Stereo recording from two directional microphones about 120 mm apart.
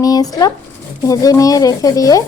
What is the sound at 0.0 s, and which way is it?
Speech, 30° left (ahead or behind).